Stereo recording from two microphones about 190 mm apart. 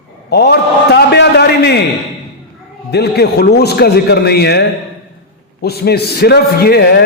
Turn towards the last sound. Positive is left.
turn(degrees=55)  # may be behind; listen again after turning